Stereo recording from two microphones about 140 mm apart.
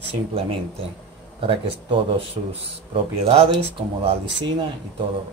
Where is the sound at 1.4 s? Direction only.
40° right (ahead or behind).